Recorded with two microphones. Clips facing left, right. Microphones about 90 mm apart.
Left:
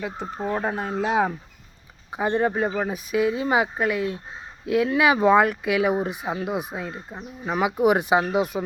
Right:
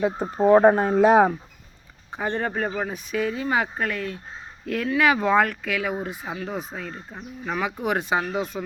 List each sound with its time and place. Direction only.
0.3 s speech: 55° right (ahead or behind)
2.0 s speech: 10° left (ahead or behind)